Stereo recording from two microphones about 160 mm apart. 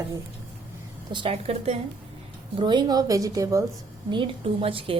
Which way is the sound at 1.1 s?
35° right (ahead or behind).